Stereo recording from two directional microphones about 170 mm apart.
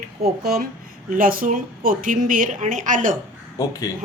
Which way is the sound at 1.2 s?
55° right (ahead or behind).